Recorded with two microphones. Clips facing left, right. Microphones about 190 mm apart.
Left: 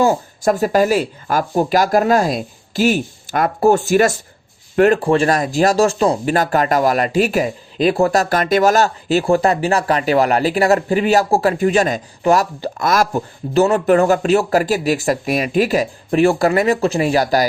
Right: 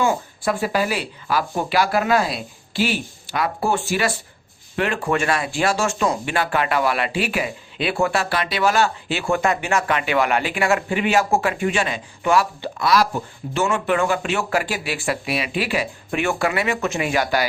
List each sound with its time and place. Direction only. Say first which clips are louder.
0.0 s speech: left 6 dB; 40° left (ahead or behind)